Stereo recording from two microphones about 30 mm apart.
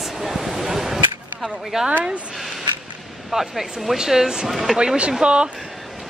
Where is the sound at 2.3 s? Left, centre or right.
Centre.